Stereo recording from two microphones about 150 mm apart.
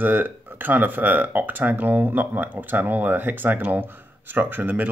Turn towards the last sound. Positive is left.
turn(degrees=-10)  # may be behind; listen again after turning